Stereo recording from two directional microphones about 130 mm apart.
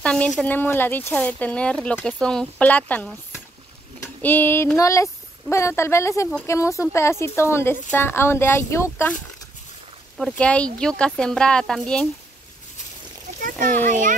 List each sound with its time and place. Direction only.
0.0 s speech: 10° left (ahead or behind)
10.1 s speech: 5° left (ahead or behind)
13.4 s a sound: 90° right
13.8 s a child's voice: 75° right (ahead or behind)